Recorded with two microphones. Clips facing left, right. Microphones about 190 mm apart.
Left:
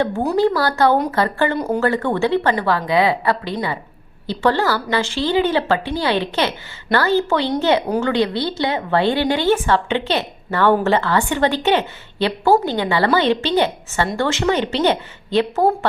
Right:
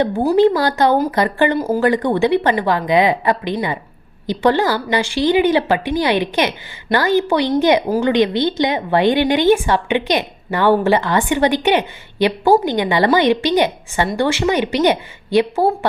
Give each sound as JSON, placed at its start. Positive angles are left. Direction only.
{"t": 0.3, "sound": "a woman's voice", "side_deg": -20}
{"t": 1.5, "sound": "speech", "side_deg": -5}
{"t": 1.8, "sound": "a woman's voice", "side_deg": -15}